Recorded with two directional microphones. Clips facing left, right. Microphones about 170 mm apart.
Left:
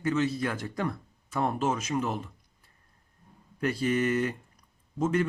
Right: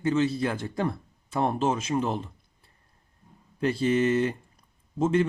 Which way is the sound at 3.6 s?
25° right (ahead or behind).